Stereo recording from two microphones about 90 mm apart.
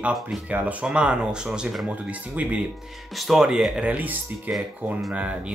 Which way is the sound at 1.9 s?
15° right (ahead or behind).